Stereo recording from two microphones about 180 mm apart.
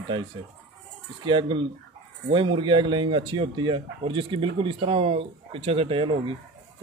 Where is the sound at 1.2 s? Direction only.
25° right (ahead or behind).